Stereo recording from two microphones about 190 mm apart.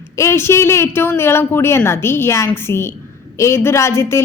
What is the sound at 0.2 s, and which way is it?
A woman's voice, 15° left (ahead or behind).